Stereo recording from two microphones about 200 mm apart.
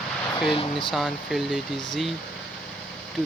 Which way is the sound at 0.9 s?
Centre (ahead or behind).